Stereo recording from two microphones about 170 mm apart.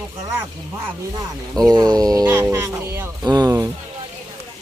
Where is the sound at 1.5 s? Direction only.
25° right (ahead or behind).